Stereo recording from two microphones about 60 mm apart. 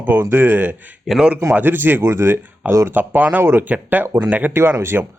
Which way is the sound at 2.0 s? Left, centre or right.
Right.